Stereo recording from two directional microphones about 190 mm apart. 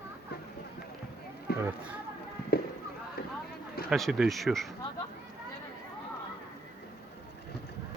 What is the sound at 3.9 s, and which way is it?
Speech, centre (ahead or behind).